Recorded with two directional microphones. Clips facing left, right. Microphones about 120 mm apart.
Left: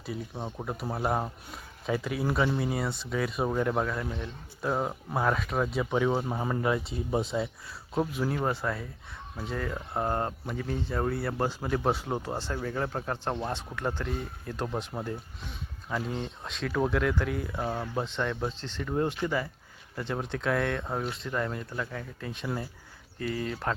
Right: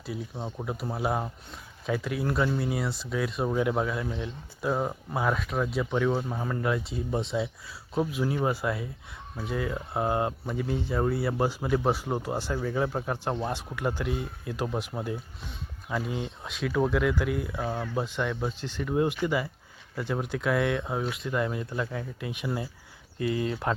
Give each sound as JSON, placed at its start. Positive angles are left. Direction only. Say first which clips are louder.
{"t": 0.4, "sound": "speech", "louder": "right 1 dB", "side_deg": 0}
{"t": 6.7, "sound": "speech", "louder": "right 2 dB", "side_deg": 0}